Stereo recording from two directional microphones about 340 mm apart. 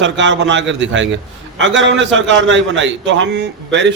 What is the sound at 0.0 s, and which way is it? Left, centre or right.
A man's voice, right.